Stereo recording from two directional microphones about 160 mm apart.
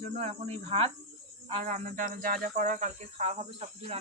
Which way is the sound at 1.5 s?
45° right (ahead or behind).